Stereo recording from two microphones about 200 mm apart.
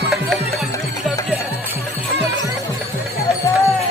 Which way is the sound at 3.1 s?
15° left (ahead or behind).